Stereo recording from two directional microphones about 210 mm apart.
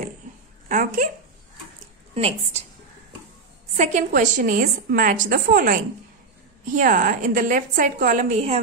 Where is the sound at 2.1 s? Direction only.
30° right (ahead or behind).